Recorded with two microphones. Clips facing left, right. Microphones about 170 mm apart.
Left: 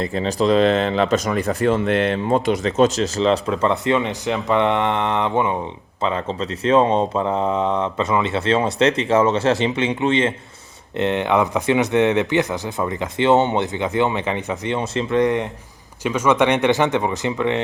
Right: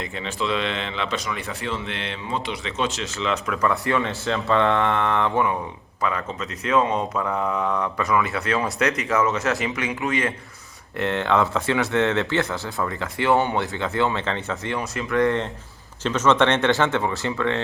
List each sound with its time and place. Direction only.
0.0 s speech: 35° left (ahead or behind); by 17.6 s 15° left (ahead or behind)